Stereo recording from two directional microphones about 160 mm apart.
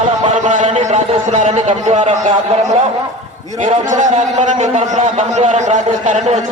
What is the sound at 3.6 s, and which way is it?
A man's voice, 50° right (ahead or behind).